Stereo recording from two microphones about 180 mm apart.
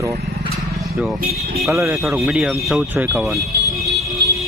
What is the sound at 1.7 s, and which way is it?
Speech, 15° right (ahead or behind).